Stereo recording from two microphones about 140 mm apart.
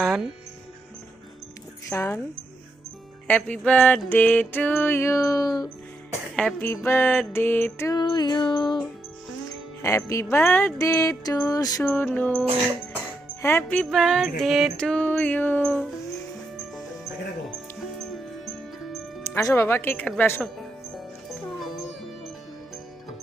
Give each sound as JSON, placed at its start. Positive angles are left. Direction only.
{"t": 0.0, "sound": "speech", "side_deg": 0}
{"t": 1.9, "sound": "music", "side_deg": 15}
{"t": 3.2, "sound": "music", "side_deg": 10}
{"t": 7.9, "sound": "music", "side_deg": 30}
{"t": 9.8, "sound": "music", "side_deg": 20}
{"t": 13.9, "sound": "music", "side_deg": 0}
{"t": 19.2, "sound": "music", "side_deg": 20}